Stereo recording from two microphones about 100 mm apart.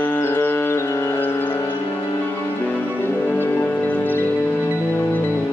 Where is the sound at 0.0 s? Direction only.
20° left (ahead or behind).